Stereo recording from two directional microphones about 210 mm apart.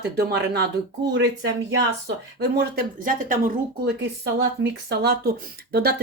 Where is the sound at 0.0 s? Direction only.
50° right (ahead or behind).